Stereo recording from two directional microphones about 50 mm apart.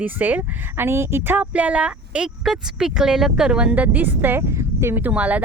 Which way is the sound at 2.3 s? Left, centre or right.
Centre.